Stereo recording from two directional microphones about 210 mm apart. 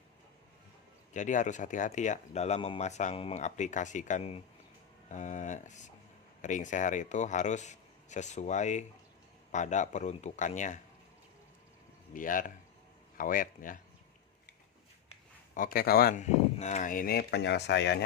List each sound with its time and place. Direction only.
1.1 s speech: 35° left (ahead or behind)
12.1 s speech: 40° left (ahead or behind)
15.5 s speech: 45° left (ahead or behind)